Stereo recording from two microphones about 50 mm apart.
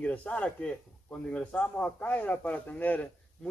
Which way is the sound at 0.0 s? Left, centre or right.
Left.